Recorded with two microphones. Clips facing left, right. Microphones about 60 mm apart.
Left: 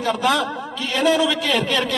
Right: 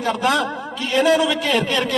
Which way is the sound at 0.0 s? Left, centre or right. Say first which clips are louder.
Even; centre.